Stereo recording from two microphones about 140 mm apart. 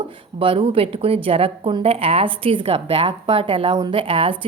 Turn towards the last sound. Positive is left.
turn(degrees=-40)  # may be behind; listen again after turning